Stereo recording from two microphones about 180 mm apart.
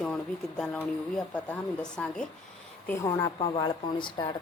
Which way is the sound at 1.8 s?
5° left (ahead or behind).